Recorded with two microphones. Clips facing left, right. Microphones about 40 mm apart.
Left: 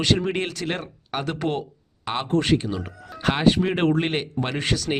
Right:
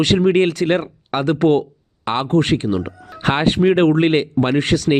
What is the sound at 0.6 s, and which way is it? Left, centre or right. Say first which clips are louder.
Speech: right 11 dB; right.